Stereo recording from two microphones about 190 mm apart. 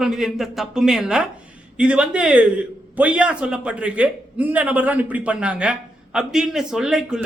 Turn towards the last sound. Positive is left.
turn(degrees=-5)  # may be behind; listen again after turning